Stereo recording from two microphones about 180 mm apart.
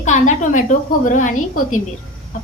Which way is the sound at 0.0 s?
45° left (ahead or behind).